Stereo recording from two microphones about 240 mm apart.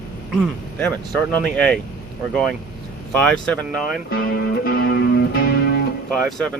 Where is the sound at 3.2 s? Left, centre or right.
Centre.